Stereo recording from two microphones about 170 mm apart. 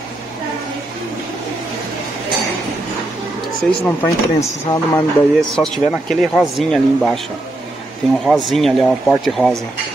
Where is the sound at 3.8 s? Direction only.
10° left (ahead or behind).